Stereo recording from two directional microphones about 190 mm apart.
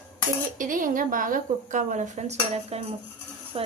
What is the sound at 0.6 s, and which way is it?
A woman's voice, 45° right (ahead or behind).